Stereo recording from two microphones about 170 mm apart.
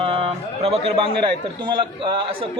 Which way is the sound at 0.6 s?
35° right (ahead or behind).